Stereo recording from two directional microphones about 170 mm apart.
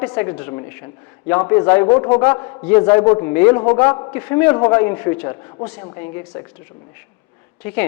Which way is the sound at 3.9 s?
25° left (ahead or behind).